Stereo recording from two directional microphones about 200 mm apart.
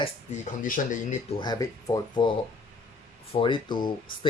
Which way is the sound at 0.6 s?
45° left (ahead or behind).